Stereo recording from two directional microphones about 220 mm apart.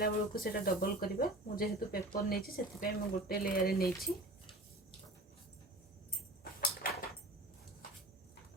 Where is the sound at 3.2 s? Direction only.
40° left (ahead or behind).